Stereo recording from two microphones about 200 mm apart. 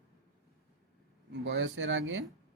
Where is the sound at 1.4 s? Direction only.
65° right (ahead or behind).